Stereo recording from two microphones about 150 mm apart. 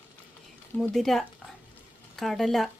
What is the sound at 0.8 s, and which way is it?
A woman's voice, centre (ahead or behind).